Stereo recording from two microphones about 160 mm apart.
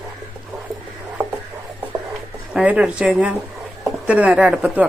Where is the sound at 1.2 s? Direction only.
20° right (ahead or behind).